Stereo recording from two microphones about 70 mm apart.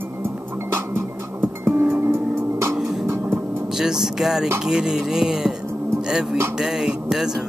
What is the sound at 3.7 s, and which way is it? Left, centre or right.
Speech, centre.